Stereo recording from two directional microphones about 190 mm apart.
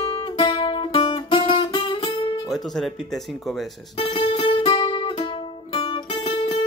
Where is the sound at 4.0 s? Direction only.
25° left (ahead or behind).